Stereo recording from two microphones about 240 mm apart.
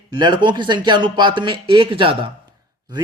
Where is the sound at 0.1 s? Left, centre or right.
Centre.